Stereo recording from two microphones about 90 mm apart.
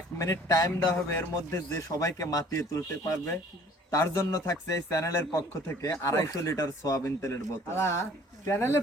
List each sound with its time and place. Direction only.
0.2 s a man's voice: 40° left (ahead or behind)